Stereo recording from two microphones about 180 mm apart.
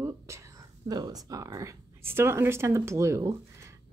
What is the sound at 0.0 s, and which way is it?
Speech, 15° right (ahead or behind).